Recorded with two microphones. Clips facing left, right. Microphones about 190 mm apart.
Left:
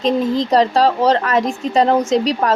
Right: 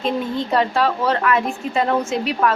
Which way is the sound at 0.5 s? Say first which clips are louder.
Left 4 dB; 35° left (ahead or behind).